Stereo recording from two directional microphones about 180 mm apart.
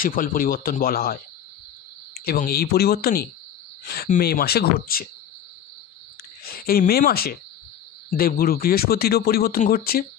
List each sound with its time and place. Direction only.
0.0 s speech: 50° left (ahead or behind)
2.3 s speech: 55° left (ahead or behind)
6.4 s speech: 55° left (ahead or behind)